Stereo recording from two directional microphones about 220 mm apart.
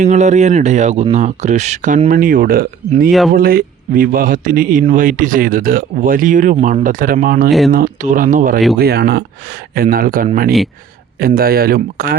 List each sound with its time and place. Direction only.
0.0 s speech: 35° right (ahead or behind)